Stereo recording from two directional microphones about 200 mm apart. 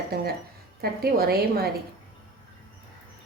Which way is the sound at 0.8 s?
50° right (ahead or behind).